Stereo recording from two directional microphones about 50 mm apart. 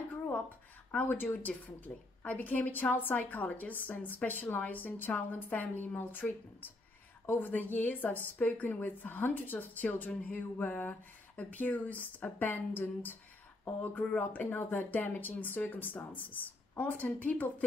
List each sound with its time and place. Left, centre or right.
1.0 s a woman's voice: left